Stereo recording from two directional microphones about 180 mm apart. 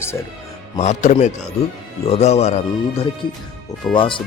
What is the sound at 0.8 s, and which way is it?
Speech, 40° left (ahead or behind).